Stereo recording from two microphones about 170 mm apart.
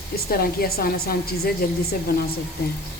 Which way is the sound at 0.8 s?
60° left (ahead or behind).